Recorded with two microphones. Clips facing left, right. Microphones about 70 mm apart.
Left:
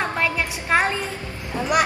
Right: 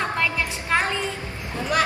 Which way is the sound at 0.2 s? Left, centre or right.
Left.